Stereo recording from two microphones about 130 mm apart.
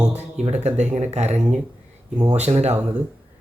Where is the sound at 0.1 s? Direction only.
55° right (ahead or behind).